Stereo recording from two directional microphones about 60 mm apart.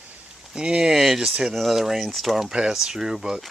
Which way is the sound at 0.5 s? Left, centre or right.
Centre.